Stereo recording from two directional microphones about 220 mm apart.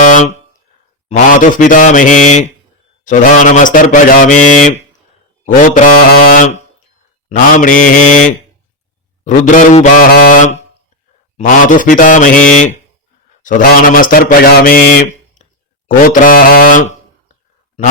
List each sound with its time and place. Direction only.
0.0 s a sound: 35° left (ahead or behind)
1.0 s speech: 35° left (ahead or behind)
9.2 s speech: 35° left (ahead or behind)
16.0 s speech: 40° left (ahead or behind)